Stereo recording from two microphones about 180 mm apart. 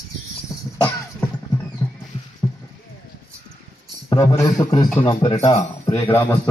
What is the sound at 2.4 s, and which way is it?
Clip-clop, 20° left (ahead or behind).